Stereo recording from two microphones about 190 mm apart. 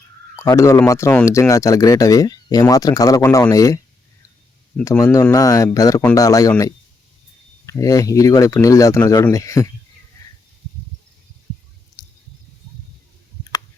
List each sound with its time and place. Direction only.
0.3 s speech: 15° left (ahead or behind)
4.9 s speech: 15° left (ahead or behind)
12.0 s a sound: 20° left (ahead or behind)